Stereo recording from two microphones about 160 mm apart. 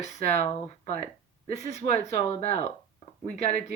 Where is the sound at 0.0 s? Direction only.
45° left (ahead or behind).